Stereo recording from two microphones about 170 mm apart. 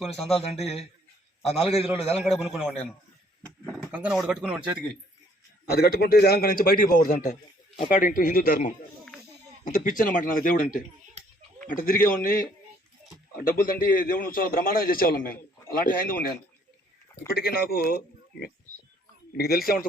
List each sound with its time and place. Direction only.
0.3 s a man's voice: 35° left (ahead or behind)
2.1 s a man's voice: centre (ahead or behind)
3.9 s speech: 5° right (ahead or behind)
5.7 s a man's voice: 65° left (ahead or behind)